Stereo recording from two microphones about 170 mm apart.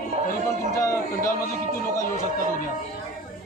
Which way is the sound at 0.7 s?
15° left (ahead or behind).